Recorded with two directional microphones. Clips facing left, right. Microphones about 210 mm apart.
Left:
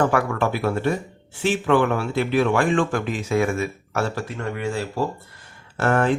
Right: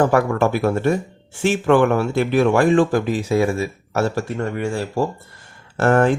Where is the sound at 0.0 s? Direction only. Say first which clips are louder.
Right 4 dB; 40° right (ahead or behind).